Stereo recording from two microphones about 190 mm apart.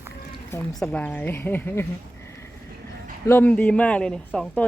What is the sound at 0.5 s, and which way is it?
A woman's voice, 10° left (ahead or behind).